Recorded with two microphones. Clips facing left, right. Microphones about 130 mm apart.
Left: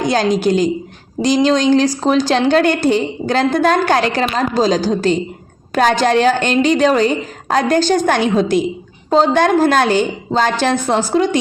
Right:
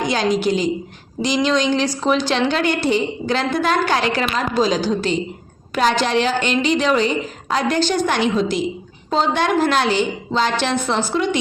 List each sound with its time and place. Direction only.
0.0 s a woman's voice: 45° left (ahead or behind)